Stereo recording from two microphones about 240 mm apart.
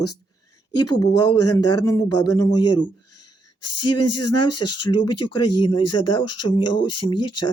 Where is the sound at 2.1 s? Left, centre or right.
Left.